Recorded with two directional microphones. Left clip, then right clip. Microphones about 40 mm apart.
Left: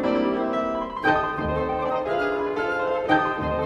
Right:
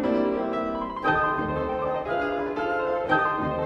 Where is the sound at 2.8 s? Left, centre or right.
Left.